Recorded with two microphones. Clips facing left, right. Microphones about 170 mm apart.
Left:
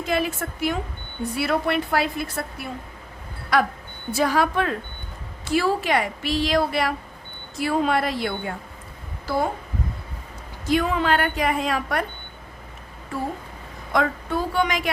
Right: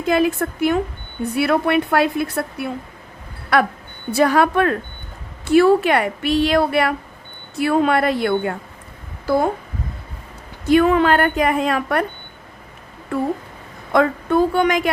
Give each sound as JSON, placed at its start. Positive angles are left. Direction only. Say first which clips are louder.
{"t": 0.1, "sound": "a woman's voice", "louder": "right 8 dB", "side_deg": -55}
{"t": 10.7, "sound": "a woman's voice", "louder": "right 7 dB", "side_deg": -60}
{"t": 13.9, "sound": "a woman's voice", "louder": "right 7 dB", "side_deg": -55}